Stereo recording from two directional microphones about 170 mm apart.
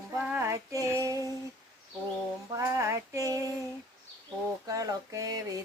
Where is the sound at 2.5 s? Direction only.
15° right (ahead or behind).